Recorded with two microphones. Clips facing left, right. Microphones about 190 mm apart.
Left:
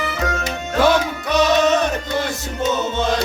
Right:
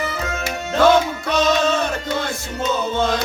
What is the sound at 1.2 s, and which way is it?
Music, 20° left (ahead or behind).